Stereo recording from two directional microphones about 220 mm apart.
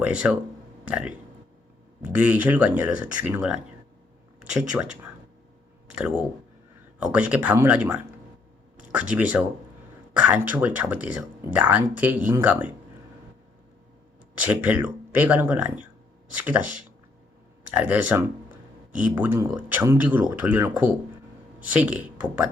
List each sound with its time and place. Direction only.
0.0 s speech: 5° right (ahead or behind)
14.3 s speech: 5° right (ahead or behind)